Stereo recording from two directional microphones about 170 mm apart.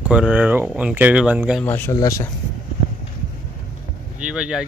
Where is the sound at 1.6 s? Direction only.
10° left (ahead or behind).